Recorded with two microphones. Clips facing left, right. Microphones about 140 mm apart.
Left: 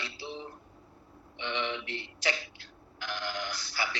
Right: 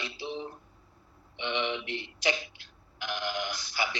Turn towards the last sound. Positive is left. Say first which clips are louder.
# right 2 dB
turn(degrees=-15)  # may be behind; listen again after turning